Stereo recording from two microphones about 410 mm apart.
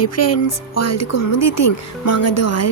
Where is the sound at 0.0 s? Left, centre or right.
Left.